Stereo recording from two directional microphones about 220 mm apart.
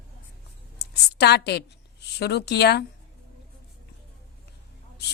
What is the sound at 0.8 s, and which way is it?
A woman's voice, 50° left (ahead or behind).